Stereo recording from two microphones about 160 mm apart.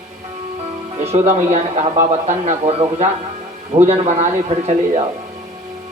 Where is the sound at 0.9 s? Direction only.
40° right (ahead or behind).